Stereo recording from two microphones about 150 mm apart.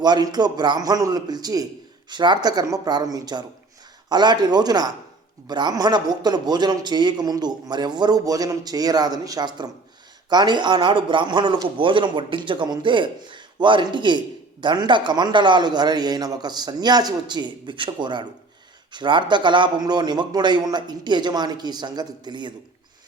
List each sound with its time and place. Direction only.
0.0 s a man's voice: 25° right (ahead or behind)